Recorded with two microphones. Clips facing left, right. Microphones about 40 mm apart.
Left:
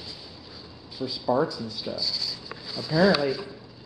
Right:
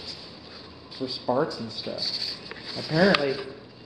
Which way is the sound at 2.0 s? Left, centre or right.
Right.